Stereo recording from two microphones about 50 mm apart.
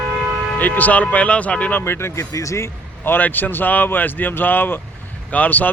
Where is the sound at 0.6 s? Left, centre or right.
Left.